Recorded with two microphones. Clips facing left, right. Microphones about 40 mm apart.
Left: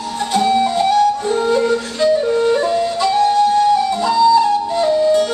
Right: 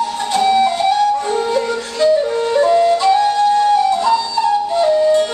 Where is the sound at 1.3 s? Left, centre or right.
Centre.